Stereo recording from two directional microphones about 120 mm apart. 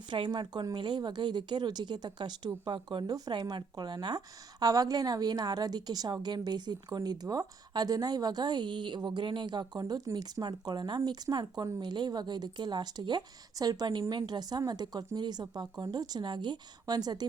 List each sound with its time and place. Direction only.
0.1 s a woman's voice: 40° right (ahead or behind)